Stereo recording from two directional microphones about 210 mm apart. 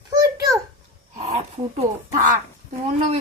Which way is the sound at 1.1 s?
35° right (ahead or behind).